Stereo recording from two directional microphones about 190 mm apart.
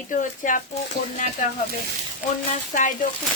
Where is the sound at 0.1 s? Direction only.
45° left (ahead or behind).